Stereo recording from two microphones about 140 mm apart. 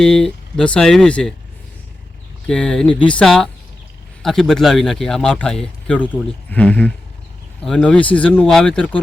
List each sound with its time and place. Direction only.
0.0 s speech: 5° left (ahead or behind)
2.5 s speech: 5° left (ahead or behind)